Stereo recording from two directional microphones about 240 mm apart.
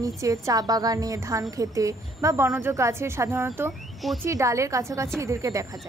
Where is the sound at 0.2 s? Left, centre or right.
Centre.